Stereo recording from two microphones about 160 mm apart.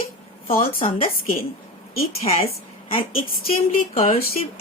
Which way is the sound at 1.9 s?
40° left (ahead or behind).